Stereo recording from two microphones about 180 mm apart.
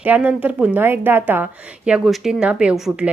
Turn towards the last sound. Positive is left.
turn(degrees=-5)  # may be behind; listen again after turning